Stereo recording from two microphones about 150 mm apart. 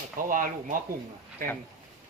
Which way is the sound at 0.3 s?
65° right (ahead or behind).